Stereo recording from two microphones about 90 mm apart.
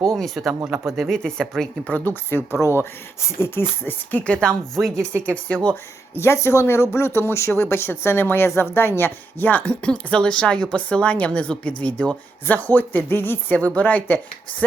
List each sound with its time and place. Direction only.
0.2 s speech: centre (ahead or behind)
2.6 s speech: 30° left (ahead or behind)
4.2 s speech: 10° left (ahead or behind)
4.9 s speech: 30° right (ahead or behind)
6.1 s speech: 30° left (ahead or behind)